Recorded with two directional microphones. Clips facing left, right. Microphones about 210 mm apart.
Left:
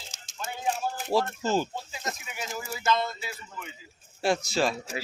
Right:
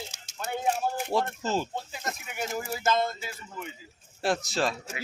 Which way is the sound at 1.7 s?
55° right (ahead or behind).